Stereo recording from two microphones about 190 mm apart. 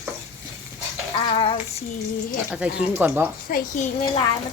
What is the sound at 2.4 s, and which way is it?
Speech, 5° right (ahead or behind).